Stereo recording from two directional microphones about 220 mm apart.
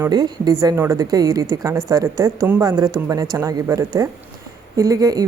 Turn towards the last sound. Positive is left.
turn(degrees=-15)  # may be behind; listen again after turning